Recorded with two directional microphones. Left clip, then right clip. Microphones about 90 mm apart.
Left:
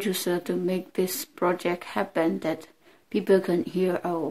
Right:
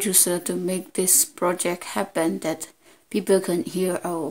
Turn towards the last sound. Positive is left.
turn(degrees=-30)  # may be behind; listen again after turning